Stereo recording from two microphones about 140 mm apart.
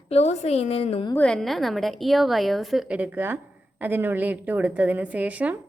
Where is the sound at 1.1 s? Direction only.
5° left (ahead or behind); by 5.6 s 10° right (ahead or behind).